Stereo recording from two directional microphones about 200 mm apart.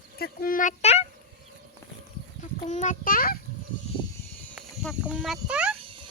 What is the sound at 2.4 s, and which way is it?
A child's voice, 35° left (ahead or behind).